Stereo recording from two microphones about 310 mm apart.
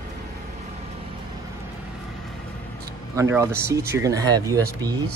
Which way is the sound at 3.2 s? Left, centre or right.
Centre.